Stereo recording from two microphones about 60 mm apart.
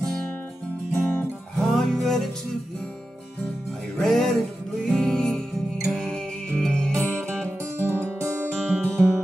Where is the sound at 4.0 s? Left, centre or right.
Centre.